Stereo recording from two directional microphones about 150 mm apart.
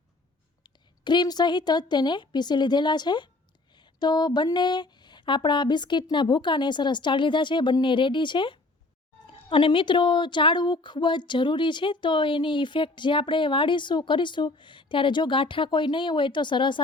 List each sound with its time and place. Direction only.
0.6 s a woman's voice: 30° left (ahead or behind)